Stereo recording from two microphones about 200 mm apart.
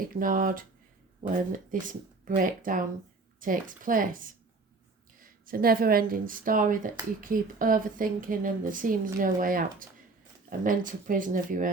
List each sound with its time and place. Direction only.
0.1 s speech: 45° right (ahead or behind)